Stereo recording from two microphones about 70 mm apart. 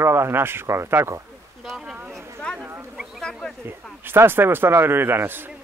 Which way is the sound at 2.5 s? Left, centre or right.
Centre.